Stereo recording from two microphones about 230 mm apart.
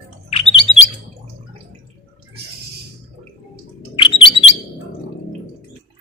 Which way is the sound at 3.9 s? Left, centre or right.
Left.